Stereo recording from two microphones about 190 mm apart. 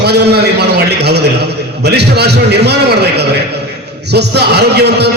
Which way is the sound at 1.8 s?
60° right (ahead or behind).